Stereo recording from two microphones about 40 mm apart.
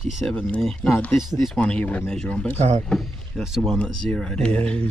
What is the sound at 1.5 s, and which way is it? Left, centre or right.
Speech, left.